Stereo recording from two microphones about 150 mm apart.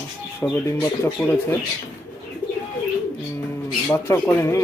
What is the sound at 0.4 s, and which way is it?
Speech, 5° left (ahead or behind).